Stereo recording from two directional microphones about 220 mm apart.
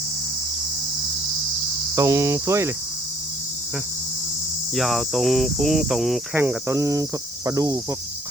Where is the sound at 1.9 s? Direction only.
15° right (ahead or behind).